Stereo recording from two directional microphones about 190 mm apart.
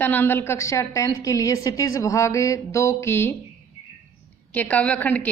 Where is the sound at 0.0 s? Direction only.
10° left (ahead or behind).